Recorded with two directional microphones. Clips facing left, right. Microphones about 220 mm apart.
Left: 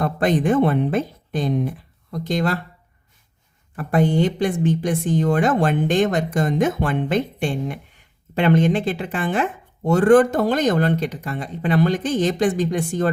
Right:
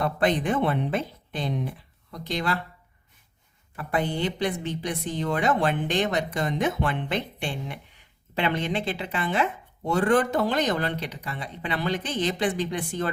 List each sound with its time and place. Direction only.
0.0 s speech: 45° left (ahead or behind)
3.8 s speech: 45° left (ahead or behind)